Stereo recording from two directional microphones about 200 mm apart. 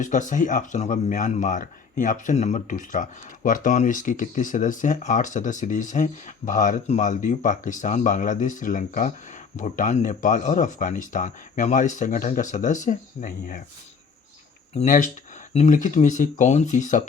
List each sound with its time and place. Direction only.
0.0 s speech: 40° left (ahead or behind)
14.8 s speech: 40° left (ahead or behind)